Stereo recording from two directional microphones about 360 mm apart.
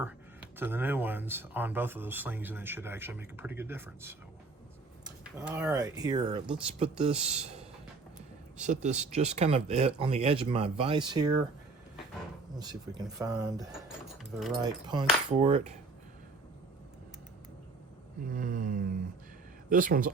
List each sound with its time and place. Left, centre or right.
0.6 s speech: centre
5.4 s speech: centre
8.5 s speech: centre
12.5 s speech: centre
14.6 s speech: centre
18.3 s a sound: right